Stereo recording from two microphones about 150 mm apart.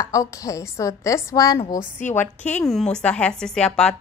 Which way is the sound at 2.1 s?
10° left (ahead or behind).